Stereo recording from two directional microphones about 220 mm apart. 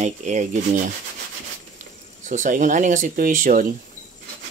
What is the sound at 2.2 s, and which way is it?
Rub, 35° right (ahead or behind).